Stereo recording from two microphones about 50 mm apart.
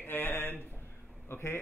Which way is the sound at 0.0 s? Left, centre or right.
Left.